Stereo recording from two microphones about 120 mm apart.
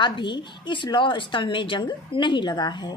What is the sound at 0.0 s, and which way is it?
A woman's voice, 40° left (ahead or behind).